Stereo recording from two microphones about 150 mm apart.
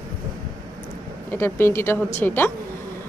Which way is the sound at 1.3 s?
15° left (ahead or behind).